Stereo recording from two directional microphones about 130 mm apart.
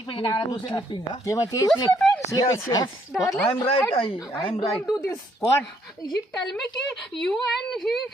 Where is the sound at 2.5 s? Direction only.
30° left (ahead or behind).